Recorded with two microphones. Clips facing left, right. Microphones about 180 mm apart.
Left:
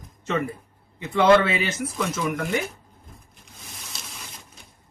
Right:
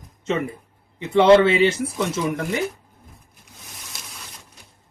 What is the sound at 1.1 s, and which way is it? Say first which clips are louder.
Speech: right 4 dB; 25° right (ahead or behind).